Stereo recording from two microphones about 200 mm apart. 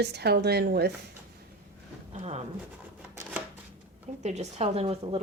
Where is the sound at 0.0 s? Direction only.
55° right (ahead or behind).